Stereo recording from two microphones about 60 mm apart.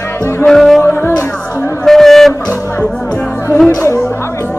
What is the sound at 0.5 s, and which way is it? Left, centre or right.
Music, centre.